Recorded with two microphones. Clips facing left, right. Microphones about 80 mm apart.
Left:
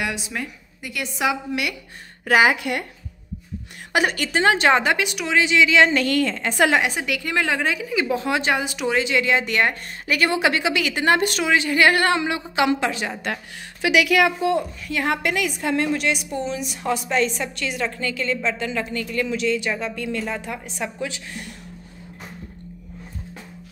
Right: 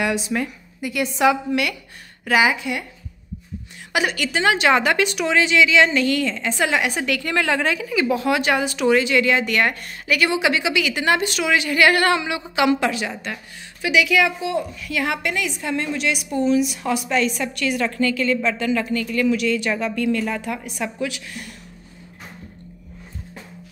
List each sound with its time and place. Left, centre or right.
0.0 s a woman's voice: centre
1.2 s a woman's voice: centre
2.2 s speech: left
3.9 s a woman's voice: left
4.9 s a woman's voice: centre
5.6 s speech: left
6.8 s a woman's voice: centre
10.0 s speech: left
11.4 s a woman's voice: left
13.2 s speech: left
14.9 s a woman's voice: left
15.2 s speech: left
16.3 s a woman's voice: left